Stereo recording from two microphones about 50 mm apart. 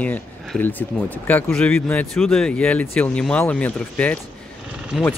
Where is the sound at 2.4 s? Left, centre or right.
Left.